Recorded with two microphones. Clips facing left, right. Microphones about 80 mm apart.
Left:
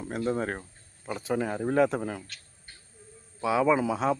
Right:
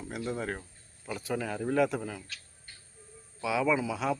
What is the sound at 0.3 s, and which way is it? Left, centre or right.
Speech, left.